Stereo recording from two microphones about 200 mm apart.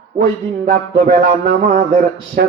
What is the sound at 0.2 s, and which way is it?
A man's voice, 50° right (ahead or behind).